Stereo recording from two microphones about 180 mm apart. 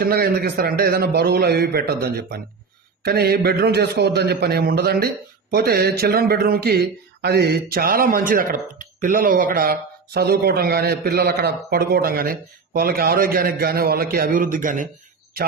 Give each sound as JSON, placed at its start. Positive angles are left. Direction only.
{"t": 0.0, "sound": "a man's voice", "side_deg": -55}